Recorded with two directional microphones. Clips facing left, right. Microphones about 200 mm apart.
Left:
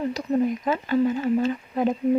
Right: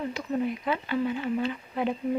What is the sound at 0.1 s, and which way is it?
Speech, 40° left (ahead or behind).